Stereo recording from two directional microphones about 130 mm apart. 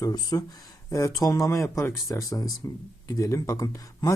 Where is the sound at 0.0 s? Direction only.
30° left (ahead or behind).